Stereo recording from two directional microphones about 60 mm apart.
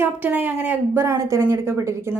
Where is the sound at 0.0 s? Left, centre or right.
Right.